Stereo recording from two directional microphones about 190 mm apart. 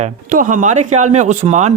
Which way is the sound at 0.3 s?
45° right (ahead or behind).